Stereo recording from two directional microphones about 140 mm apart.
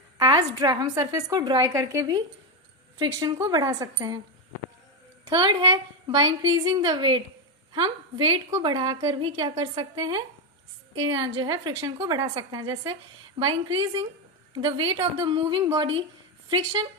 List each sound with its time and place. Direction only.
0.2 s a woman's voice: 30° right (ahead or behind)
5.2 s a woman's voice: 30° right (ahead or behind)